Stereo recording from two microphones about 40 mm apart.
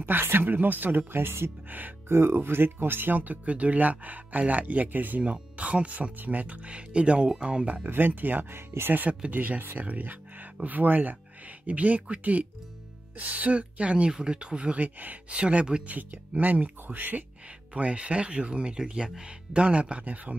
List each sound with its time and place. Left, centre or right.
0.0 s speech: right
3.2 s speech: right
5.2 s speech: right
7.6 s speech: right
7.9 s speech: right
8.5 s speech: right
9.3 s speech: right
14.8 s speech: right
15.3 s speech: right
15.9 s speech: right
17.7 s speech: right